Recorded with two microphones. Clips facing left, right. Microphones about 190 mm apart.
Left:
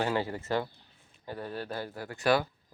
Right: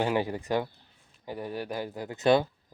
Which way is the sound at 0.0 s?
15° right (ahead or behind).